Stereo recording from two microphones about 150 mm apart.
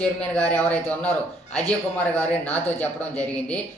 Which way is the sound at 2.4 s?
10° left (ahead or behind).